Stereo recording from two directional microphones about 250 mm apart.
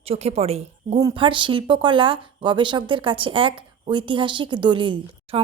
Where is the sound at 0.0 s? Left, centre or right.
Right.